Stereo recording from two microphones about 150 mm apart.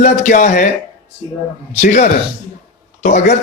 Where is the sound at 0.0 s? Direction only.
55° left (ahead or behind).